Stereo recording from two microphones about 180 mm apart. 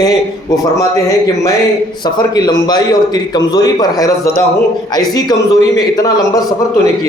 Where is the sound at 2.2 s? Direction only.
20° left (ahead or behind).